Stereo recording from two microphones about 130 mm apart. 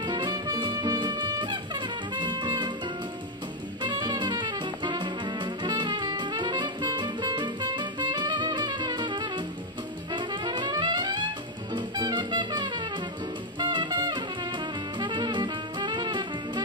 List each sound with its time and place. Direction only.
0.0 s music: 35° right (ahead or behind)
3.8 s brass instrument: 35° right (ahead or behind)
10.1 s music: 35° right (ahead or behind)